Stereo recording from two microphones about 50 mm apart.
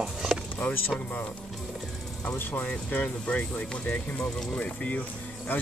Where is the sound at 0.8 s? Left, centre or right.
Left.